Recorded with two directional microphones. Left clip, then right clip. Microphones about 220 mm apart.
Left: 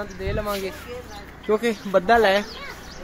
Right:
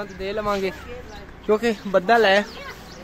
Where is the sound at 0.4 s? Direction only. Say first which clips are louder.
Right 4 dB; 30° right (ahead or behind).